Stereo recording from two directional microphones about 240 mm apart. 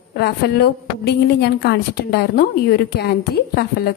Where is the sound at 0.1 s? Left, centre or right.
Left.